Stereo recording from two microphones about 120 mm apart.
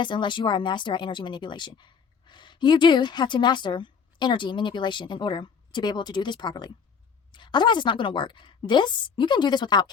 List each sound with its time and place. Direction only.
0.0 s speech: 40° left (ahead or behind)